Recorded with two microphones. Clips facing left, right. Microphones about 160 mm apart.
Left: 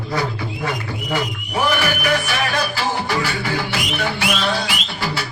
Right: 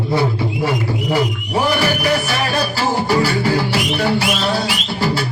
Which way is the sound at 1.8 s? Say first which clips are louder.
Right 3 dB; 35° right (ahead or behind).